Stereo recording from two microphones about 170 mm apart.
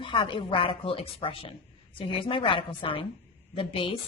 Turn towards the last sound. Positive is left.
turn(degrees=30)  # may be behind; listen again after turning